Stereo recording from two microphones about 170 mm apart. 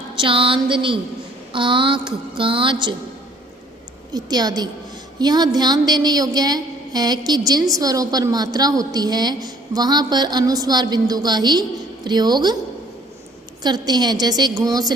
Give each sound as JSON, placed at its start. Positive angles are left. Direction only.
{"t": 0.2, "sound": "a sound", "side_deg": -30}
{"t": 1.5, "sound": "a woman's voice", "side_deg": -30}
{"t": 4.1, "sound": "a woman's voice", "side_deg": -25}
{"t": 13.6, "sound": "a woman's voice", "side_deg": -25}